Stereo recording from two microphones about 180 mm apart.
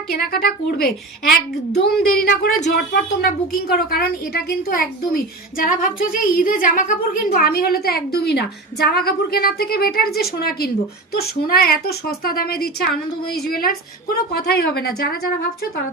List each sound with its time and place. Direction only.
0.1 s a woman's voice: 55° left (ahead or behind)